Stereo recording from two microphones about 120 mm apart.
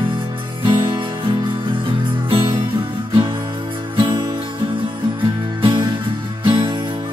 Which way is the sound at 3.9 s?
40° right (ahead or behind).